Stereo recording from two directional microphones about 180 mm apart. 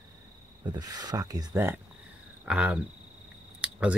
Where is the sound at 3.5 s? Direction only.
5° right (ahead or behind).